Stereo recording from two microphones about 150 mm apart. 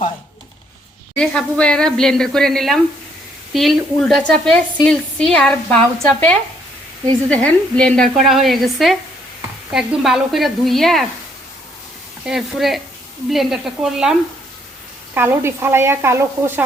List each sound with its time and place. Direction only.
1.1 s a woman's voice: 5° left (ahead or behind)
12.2 s a woman's voice: centre (ahead or behind)
15.1 s speech: 15° right (ahead or behind)